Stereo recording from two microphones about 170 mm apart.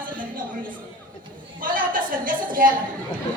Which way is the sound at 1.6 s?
55° right (ahead or behind).